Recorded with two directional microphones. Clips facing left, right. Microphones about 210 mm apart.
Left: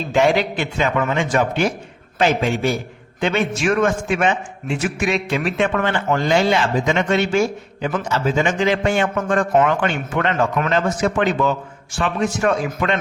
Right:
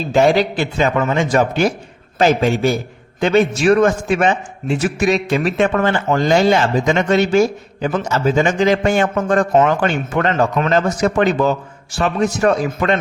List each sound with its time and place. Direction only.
0.1 s a man's voice: 35° right (ahead or behind)